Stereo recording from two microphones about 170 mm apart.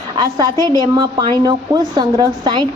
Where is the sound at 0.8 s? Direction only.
30° right (ahead or behind).